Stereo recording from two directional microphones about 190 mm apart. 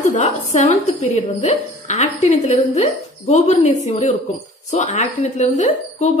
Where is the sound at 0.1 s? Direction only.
40° left (ahead or behind).